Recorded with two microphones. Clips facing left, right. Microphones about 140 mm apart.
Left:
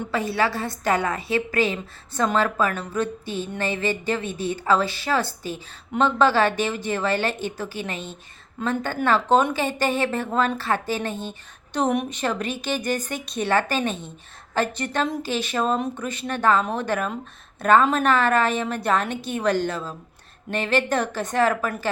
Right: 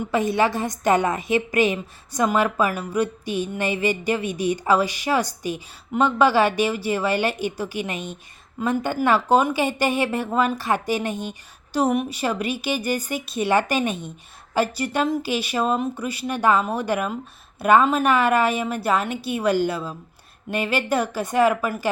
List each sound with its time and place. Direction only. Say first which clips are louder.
0.1 s a woman's voice: right 3 dB; 20° right (ahead or behind)